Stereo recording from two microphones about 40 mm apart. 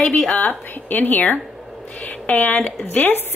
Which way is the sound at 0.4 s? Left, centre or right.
Left.